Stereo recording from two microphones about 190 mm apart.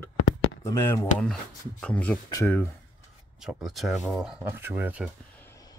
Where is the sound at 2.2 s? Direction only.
15° left (ahead or behind).